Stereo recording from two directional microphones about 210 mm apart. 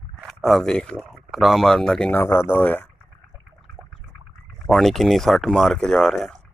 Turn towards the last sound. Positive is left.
turn(degrees=0)  # may be behind; listen again after turning